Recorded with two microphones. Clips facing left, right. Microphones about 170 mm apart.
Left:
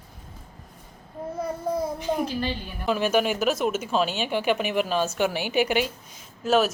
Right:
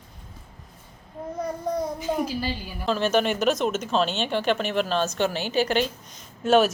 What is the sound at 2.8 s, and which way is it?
A woman's voice, 10° left (ahead or behind).